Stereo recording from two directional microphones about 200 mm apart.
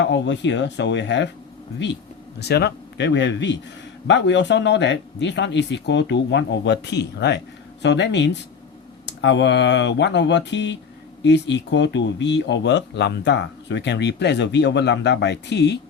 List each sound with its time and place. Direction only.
0.0 s speech: 60° left (ahead or behind)